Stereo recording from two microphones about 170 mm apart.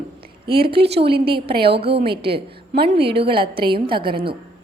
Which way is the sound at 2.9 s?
35° right (ahead or behind).